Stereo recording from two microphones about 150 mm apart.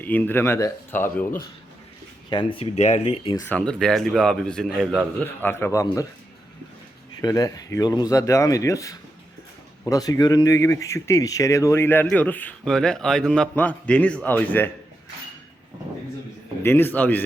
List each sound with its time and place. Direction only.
0.0 s a man's voice: 10° left (ahead or behind)
2.3 s speech: 35° left (ahead or behind)
3.4 s speech: 5° left (ahead or behind)
5.2 s a man's voice: 15° left (ahead or behind)
7.2 s a man's voice: 25° left (ahead or behind)
16.6 s a man's voice: 15° left (ahead or behind)